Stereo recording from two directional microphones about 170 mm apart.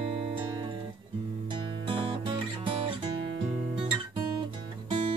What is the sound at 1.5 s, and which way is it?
Music, 30° right (ahead or behind).